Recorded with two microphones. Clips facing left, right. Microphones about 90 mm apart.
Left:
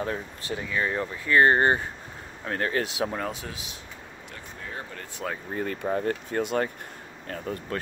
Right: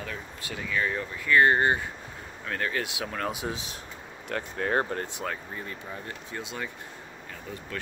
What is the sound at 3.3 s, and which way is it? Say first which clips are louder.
Speech: right 5 dB; 25° right (ahead or behind).